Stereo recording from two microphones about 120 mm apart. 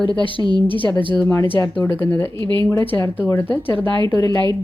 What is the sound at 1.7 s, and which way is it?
Speech, 15° left (ahead or behind).